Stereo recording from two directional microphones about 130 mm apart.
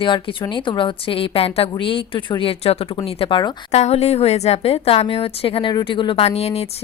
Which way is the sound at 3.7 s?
55° left (ahead or behind).